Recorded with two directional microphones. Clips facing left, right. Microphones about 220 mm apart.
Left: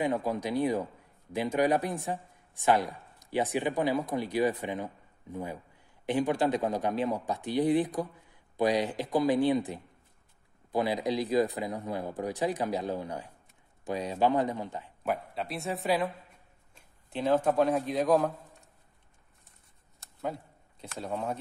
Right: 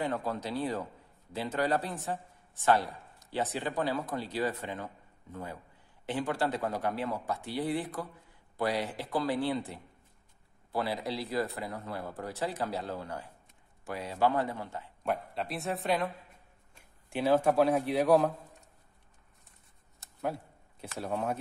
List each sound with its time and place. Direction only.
0.0 s speech: 10° left (ahead or behind)
15.0 s speech: centre (ahead or behind)
20.0 s a sound: centre (ahead or behind)
20.8 s speech: 5° right (ahead or behind)